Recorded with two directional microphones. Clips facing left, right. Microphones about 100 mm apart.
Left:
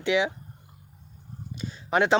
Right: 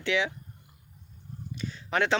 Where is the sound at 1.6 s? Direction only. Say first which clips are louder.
Left 4 dB; 20° left (ahead or behind).